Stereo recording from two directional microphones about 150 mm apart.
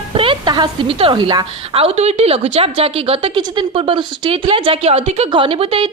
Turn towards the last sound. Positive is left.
turn(degrees=-40)  # may be behind; listen again after turning